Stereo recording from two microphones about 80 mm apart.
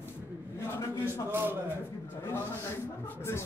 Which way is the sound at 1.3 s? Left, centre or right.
Right.